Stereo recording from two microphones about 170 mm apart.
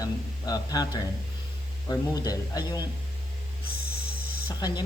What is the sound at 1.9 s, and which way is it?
Speech, 20° left (ahead or behind).